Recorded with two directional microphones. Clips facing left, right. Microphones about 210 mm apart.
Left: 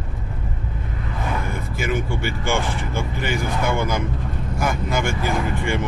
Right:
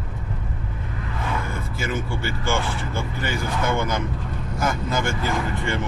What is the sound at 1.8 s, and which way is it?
Speech, 15° left (ahead or behind).